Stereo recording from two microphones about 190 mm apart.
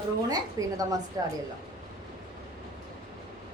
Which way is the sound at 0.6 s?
15° right (ahead or behind).